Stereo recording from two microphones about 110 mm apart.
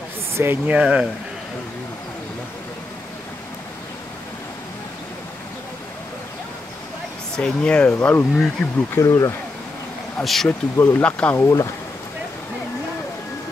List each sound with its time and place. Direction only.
0.3 s speech: 20° right (ahead or behind)
7.3 s speech: 10° left (ahead or behind)
8.6 s speech: centre (ahead or behind)
8.9 s speech: 25° left (ahead or behind)
10.2 s speech: centre (ahead or behind)
10.8 s speech: 15° left (ahead or behind)
11.4 s speech: 30° left (ahead or behind)